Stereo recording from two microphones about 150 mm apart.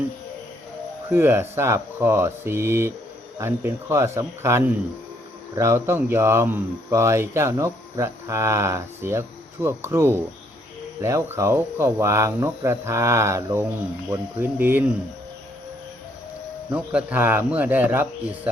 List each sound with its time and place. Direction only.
1.1 s speech: 15° right (ahead or behind)
16.7 s speech: 10° right (ahead or behind)